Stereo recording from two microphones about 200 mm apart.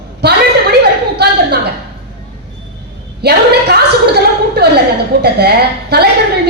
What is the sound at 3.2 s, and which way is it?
Speech, 55° right (ahead or behind).